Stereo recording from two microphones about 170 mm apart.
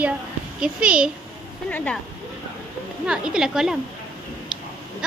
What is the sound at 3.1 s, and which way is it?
Speech, 5° right (ahead or behind).